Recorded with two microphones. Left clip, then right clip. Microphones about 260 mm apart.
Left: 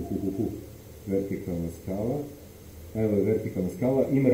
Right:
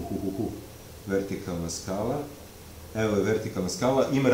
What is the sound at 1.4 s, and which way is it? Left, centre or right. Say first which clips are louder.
Speech: right 1 dB; right.